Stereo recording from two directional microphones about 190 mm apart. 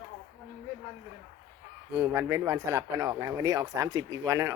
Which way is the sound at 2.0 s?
10° right (ahead or behind).